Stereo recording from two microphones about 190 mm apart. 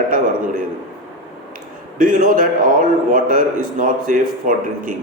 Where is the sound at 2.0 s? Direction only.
45° right (ahead or behind).